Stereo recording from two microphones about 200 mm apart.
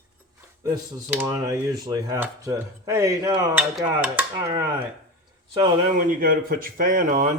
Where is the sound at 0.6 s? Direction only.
20° right (ahead or behind).